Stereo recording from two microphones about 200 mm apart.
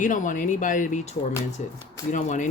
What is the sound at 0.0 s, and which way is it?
Speech, 40° left (ahead or behind).